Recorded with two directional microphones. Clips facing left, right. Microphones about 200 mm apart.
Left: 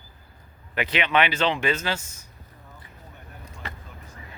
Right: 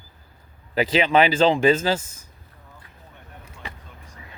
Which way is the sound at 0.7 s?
35° right (ahead or behind).